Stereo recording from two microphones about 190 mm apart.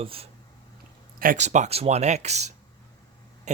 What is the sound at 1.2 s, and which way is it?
Speech, 40° right (ahead or behind).